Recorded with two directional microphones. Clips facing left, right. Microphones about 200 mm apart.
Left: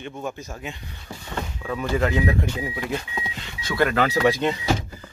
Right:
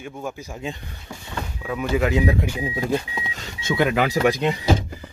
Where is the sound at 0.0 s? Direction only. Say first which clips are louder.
Even; 10° right (ahead or behind).